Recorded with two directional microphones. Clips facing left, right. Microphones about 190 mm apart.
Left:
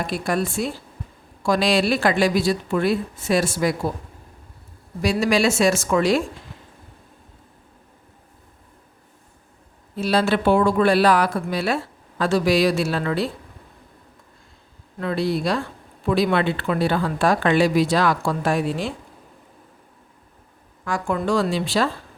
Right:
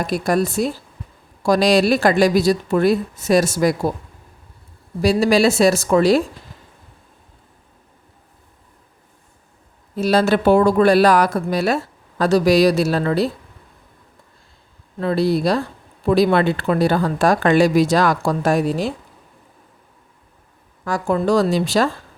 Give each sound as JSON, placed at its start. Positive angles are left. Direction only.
{"t": 0.1, "sound": "speech", "side_deg": -40}
{"t": 5.0, "sound": "speech", "side_deg": -35}
{"t": 9.9, "sound": "speech", "side_deg": -40}
{"t": 14.9, "sound": "speech", "side_deg": -35}
{"t": 20.8, "sound": "speech", "side_deg": -35}